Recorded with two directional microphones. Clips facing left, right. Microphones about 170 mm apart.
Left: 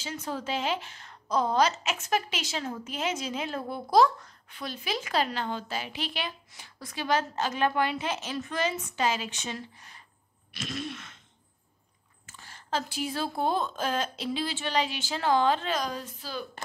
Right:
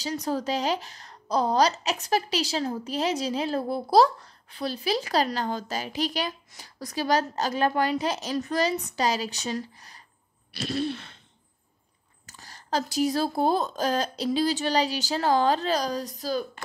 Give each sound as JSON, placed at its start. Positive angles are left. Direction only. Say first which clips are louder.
{"t": 0.0, "sound": "a woman's voice", "louder": "right 6 dB", "side_deg": -40}
{"t": 10.5, "sound": "a sound", "louder": "right 7 dB", "side_deg": -35}
{"t": 12.3, "sound": "a woman's voice", "louder": "right 3 dB", "side_deg": -40}